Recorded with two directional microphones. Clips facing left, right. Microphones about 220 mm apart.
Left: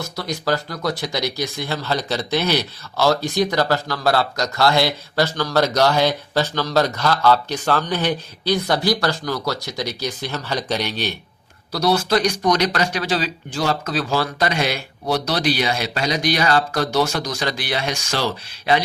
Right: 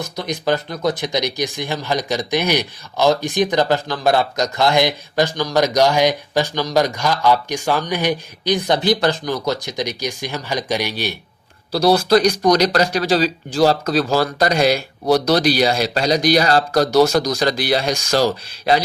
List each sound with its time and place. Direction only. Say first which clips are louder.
0.0 s speech: right 2 dB; 20° right (ahead or behind)
11.7 s speech: right 5 dB; 35° right (ahead or behind)